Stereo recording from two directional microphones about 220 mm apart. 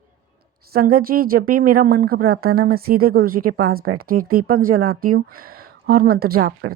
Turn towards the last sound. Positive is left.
turn(degrees=-45)  # may be behind; listen again after turning